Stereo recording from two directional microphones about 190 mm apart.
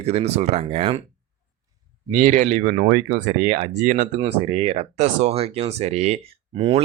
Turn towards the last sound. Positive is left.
turn(degrees=-30)  # may be behind; listen again after turning